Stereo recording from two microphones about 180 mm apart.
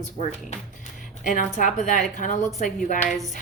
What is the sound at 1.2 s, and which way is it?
Speech, 45° left (ahead or behind).